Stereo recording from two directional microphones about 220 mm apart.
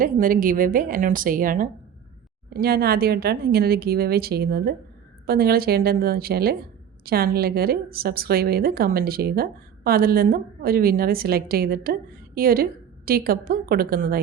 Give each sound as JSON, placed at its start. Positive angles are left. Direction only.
{"t": 0.0, "sound": "a woman's voice", "side_deg": -40}